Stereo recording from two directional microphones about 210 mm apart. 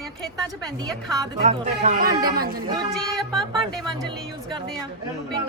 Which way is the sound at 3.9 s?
20° right (ahead or behind).